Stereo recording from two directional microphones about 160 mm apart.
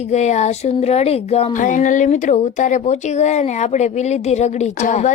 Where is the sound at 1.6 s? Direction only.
55° left (ahead or behind).